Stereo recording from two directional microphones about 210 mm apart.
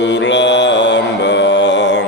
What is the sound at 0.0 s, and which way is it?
Mantra, 55° left (ahead or behind).